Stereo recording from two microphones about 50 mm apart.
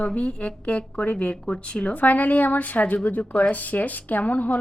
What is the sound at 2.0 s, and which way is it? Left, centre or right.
A woman's voice, left.